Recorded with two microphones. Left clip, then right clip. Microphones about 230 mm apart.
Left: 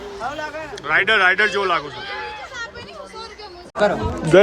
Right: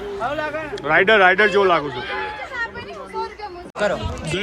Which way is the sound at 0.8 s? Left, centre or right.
Centre.